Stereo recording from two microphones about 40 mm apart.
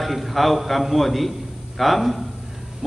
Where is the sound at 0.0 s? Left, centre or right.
Centre.